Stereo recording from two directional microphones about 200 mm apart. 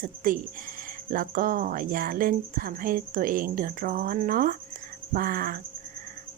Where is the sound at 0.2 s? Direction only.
45° right (ahead or behind).